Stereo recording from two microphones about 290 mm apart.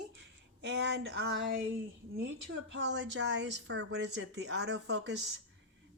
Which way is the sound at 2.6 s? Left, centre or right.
Right.